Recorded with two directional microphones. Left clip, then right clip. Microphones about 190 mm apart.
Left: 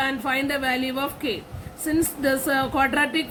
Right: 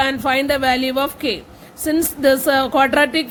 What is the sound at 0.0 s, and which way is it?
Speech, 50° right (ahead or behind).